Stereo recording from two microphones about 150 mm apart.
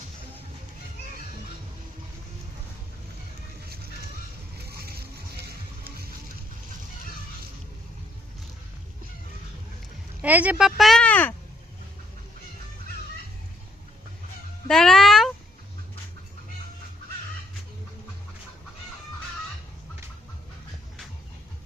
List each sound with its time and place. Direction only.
4.5 s a sound: 90° right
10.2 s speech: 10° right (ahead or behind); by 11.3 s 10° left (ahead or behind)
14.7 s music: 5° left (ahead or behind)